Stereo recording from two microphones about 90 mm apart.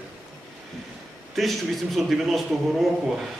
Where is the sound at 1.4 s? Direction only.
Centre (ahead or behind).